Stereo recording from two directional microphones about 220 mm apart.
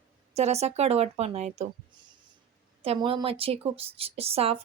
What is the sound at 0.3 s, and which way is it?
A woman's voice, 30° right (ahead or behind).